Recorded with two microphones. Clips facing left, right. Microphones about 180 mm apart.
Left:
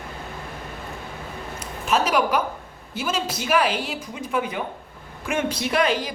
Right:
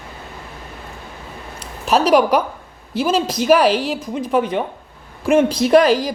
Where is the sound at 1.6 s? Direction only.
35° right (ahead or behind).